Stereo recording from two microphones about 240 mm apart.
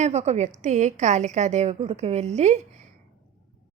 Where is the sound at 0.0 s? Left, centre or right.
Right.